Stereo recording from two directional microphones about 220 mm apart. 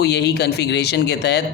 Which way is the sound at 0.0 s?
50° left (ahead or behind).